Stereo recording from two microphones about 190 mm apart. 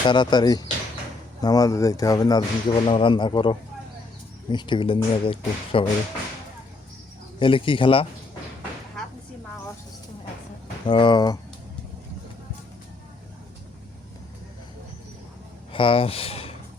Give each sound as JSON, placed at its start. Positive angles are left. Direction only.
{"t": 0.0, "sound": "speech", "side_deg": 25}
{"t": 7.3, "sound": "speech", "side_deg": 25}
{"t": 10.8, "sound": "speech", "side_deg": 25}
{"t": 15.7, "sound": "speech", "side_deg": 30}